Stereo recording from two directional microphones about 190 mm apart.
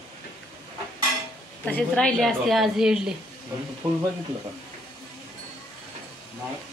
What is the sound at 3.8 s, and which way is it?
Speech, 20° right (ahead or behind).